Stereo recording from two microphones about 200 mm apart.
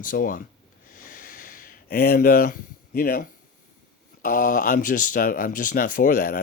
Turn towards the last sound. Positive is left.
turn(degrees=45)  # may be behind; listen again after turning